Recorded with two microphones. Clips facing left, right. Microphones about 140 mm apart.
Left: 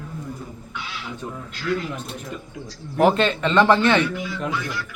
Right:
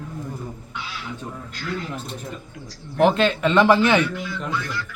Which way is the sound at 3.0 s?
Centre (ahead or behind).